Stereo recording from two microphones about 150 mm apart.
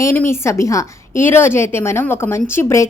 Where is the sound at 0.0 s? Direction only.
15° left (ahead or behind).